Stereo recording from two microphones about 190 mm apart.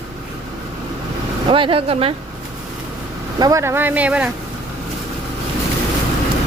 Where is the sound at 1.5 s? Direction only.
30° right (ahead or behind).